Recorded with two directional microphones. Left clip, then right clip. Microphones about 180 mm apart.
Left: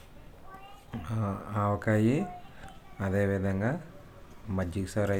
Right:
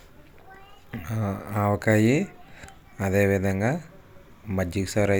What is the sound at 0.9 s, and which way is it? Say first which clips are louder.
Speech: right 4 dB; 20° right (ahead or behind).